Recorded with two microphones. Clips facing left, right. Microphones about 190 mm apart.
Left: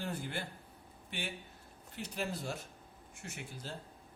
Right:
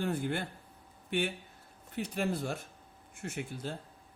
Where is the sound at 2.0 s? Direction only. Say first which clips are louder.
Right 6 dB; 55° right (ahead or behind).